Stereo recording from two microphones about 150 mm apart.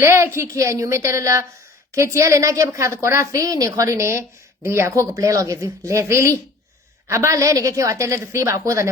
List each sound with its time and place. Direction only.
0.0 s a woman's voice: 15° right (ahead or behind)